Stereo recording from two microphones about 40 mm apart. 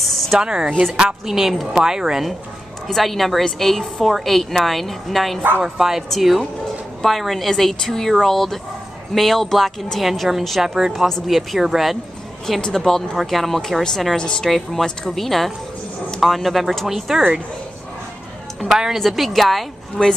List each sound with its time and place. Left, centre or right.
0.0 s a sound: centre
0.4 s speech: centre
0.7 s speech: centre
0.9 s speech: centre
1.5 s a woman's voice: centre
1.8 s speech: centre
2.9 s a woman's voice: centre
5.6 s a woman's voice: centre
10.6 s speech: centre
12.6 s speech: centre
14.1 s a woman's voice: left
14.4 s a woman's voice: centre
18.9 s a woman's voice: centre
20.0 s a woman's voice: left